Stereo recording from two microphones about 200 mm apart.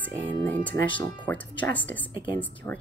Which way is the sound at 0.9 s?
25° left (ahead or behind).